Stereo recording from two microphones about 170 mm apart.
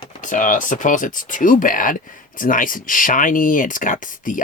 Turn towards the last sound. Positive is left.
turn(degrees=50)  # may be behind; listen again after turning